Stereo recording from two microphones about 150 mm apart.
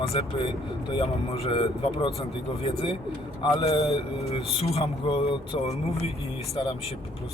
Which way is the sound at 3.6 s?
40° left (ahead or behind).